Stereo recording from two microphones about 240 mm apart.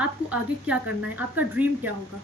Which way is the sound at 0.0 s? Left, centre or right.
Centre.